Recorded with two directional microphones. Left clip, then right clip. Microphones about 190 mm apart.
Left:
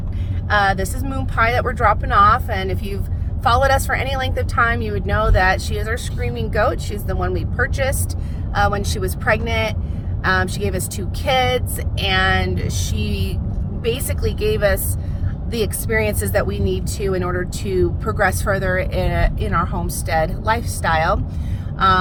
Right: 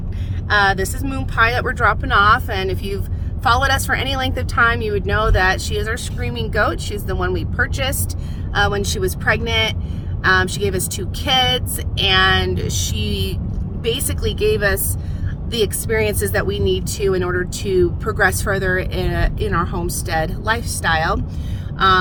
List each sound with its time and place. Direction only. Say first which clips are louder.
0.4 s a woman's voice: right 1 dB; 20° right (ahead or behind)